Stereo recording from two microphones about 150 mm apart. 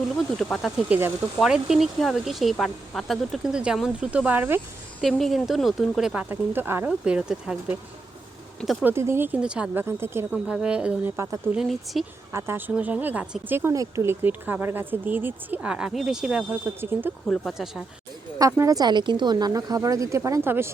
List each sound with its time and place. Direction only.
0.4 s speech: centre (ahead or behind)
0.9 s speech: 15° right (ahead or behind)
1.4 s speech: 5° right (ahead or behind)
5.0 s speech: centre (ahead or behind)
8.6 s speech: centre (ahead or behind)
8.9 s speech: 15° right (ahead or behind)
10.3 s speech: 5° right (ahead or behind)
12.3 s speech: 15° right (ahead or behind)
17.2 s speech: 5° left (ahead or behind)
18.3 s speech: 20° right (ahead or behind)